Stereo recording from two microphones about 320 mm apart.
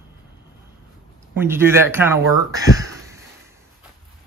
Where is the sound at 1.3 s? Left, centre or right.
Centre.